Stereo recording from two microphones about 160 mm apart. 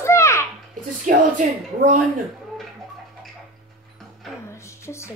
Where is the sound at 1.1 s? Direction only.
55° right (ahead or behind).